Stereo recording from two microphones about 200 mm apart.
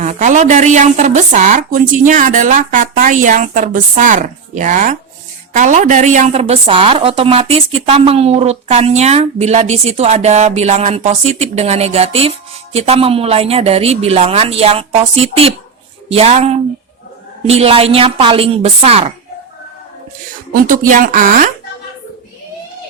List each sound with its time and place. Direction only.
0.0 s a woman's voice: 35° right (ahead or behind)
20.5 s a woman's voice: 45° right (ahead or behind)